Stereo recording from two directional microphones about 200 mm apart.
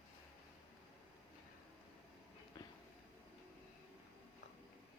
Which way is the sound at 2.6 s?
20° left (ahead or behind).